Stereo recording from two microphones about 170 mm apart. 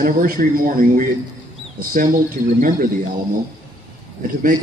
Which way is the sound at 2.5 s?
55° right (ahead or behind).